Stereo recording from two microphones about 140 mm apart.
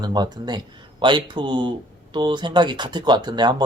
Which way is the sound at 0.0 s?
30° right (ahead or behind).